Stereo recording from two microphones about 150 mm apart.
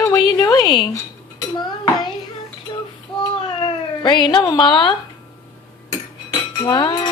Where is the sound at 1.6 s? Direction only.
30° left (ahead or behind).